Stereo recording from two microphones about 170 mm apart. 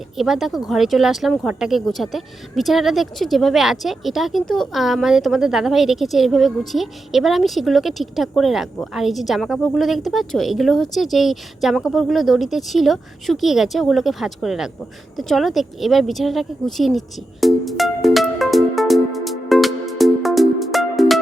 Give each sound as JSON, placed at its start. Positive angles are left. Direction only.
{"t": 0.2, "sound": "speech", "side_deg": 0}
{"t": 17.4, "sound": "music", "side_deg": 0}